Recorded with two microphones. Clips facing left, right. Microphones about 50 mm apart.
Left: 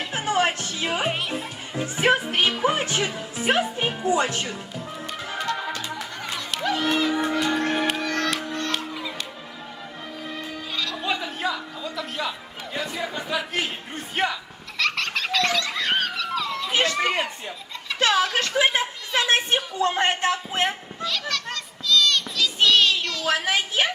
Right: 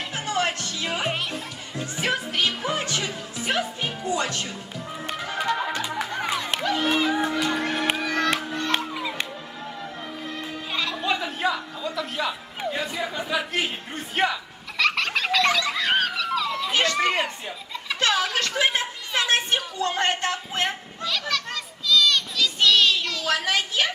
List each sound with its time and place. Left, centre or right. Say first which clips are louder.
0.1 s music: left 4 dB; left
1.0 s music: left 1 dB; centre
2.0 s music: left 5 dB; left
5.1 s music: right 3 dB; centre; by 6.6 s right
6.7 s music: left 1 dB; centre
6.9 s music: right 1 dB; centre
7.3 s music: left 2 dB; centre
10.9 s music: right 1 dB; centre
14.8 s baby laughter: right 2 dB; centre
15.5 s a sound: right 1 dB; centre
16.7 s a sound: even; centre
21.0 s children playing: right 1 dB; centre
22.6 s child singing: left 1 dB; centre